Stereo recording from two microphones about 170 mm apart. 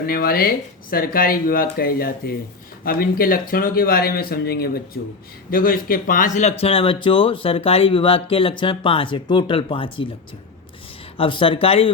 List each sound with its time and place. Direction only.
0.0 s speech: 60° left (ahead or behind); by 10.1 s 30° left (ahead or behind)
11.2 s speech: 30° left (ahead or behind)